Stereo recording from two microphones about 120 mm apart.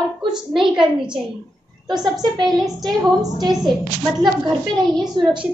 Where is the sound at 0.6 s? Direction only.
40° right (ahead or behind).